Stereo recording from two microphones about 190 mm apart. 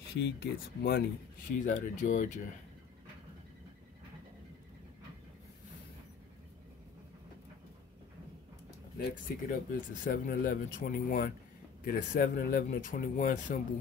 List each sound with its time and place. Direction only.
0.2 s speech: 60° left (ahead or behind)
1.6 s speech: 40° left (ahead or behind)
9.1 s speech: 45° left (ahead or behind)